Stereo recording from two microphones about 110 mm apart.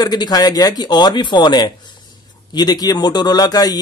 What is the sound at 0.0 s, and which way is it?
A man's voice, 40° left (ahead or behind).